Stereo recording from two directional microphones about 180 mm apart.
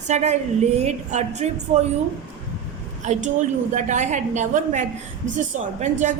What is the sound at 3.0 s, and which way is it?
A woman's voice, 40° right (ahead or behind).